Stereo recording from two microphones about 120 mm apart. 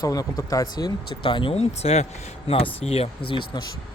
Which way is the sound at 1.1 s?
45° left (ahead or behind).